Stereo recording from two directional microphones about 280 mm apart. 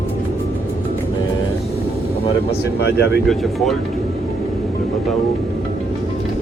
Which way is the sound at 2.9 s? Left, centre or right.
Left.